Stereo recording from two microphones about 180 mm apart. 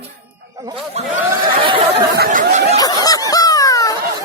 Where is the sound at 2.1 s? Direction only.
55° right (ahead or behind).